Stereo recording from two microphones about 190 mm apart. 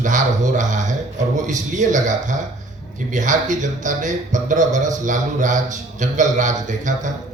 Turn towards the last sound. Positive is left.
turn(degrees=-40)  # may be behind; listen again after turning